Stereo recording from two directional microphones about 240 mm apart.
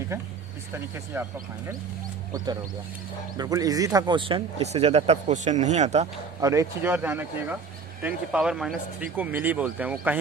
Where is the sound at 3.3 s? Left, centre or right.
Centre.